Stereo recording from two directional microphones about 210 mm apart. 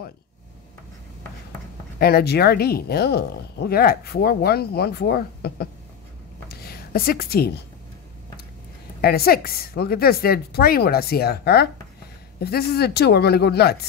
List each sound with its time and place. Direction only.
2.0 s a woman's voice: 45° left (ahead or behind)
9.0 s speech: 45° left (ahead or behind)